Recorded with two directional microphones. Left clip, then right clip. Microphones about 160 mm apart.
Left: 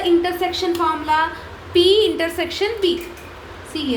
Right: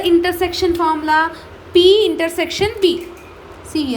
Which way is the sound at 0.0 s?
55° right (ahead or behind).